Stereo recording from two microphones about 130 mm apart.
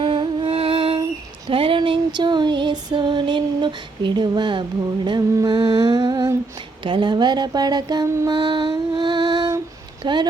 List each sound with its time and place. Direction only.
0.0 s music: 40° right (ahead or behind)
0.4 s music: 50° right (ahead or behind)
1.5 s female singing: 45° right (ahead or behind)
5.0 s humming: 35° right (ahead or behind)
6.8 s female singing: 40° right (ahead or behind)
8.3 s music: 35° right (ahead or behind)
10.0 s speech: 35° right (ahead or behind)